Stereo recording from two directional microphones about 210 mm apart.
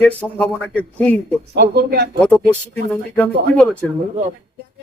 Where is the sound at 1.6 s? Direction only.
50° right (ahead or behind).